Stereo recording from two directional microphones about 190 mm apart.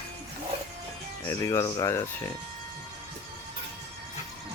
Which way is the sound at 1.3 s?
15° left (ahead or behind).